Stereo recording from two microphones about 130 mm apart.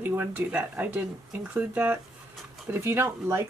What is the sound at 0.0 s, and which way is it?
Speech, 15° right (ahead or behind).